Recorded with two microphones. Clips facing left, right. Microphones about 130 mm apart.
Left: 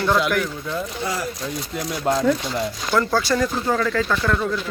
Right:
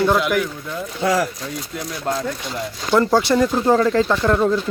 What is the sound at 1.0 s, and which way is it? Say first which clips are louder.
Speech: right 12 dB; 90° right.